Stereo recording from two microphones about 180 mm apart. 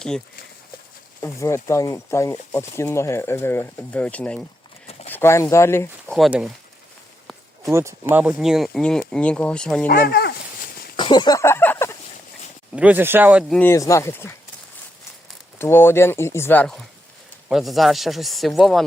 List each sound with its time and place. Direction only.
1.2 s speech: 15° left (ahead or behind)
4.9 s a sound: 35° left (ahead or behind)
5.1 s speech: 15° left (ahead or behind)
6.1 s speech: centre (ahead or behind)
7.6 s speech: 15° right (ahead or behind); by 9.8 s 5° left (ahead or behind)
9.8 s speech: 55° left (ahead or behind)
10.9 s a sound: 25° left (ahead or behind)
12.7 s speech: 10° right (ahead or behind)
13.5 s speech: 10° left (ahead or behind)
15.5 s speech: 15° left (ahead or behind)